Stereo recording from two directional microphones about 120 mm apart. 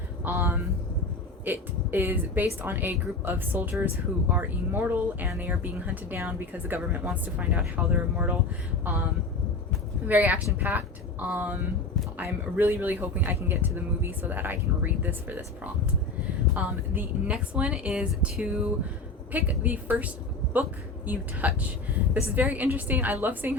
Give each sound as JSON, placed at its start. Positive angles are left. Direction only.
{"t": 0.3, "sound": "speech", "side_deg": -15}
{"t": 10.1, "sound": "a woman's voice", "side_deg": -15}